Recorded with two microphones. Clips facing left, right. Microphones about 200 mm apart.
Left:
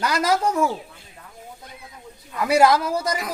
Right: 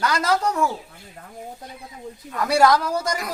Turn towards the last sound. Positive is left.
turn(degrees=5)  # may be behind; listen again after turning